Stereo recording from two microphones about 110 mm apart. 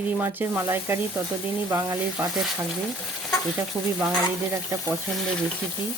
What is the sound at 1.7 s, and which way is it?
Stir, 25° right (ahead or behind).